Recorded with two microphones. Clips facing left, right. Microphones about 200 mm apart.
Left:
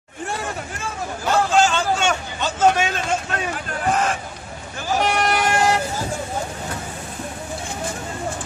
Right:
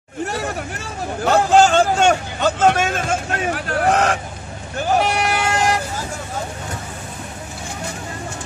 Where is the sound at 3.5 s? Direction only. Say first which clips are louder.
Right 5 dB; 75° right (ahead or behind).